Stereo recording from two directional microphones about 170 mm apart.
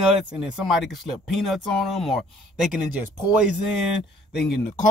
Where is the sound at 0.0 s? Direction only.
Centre (ahead or behind).